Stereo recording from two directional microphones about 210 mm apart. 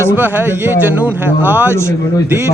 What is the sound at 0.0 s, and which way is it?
A man's voice, 10° right (ahead or behind).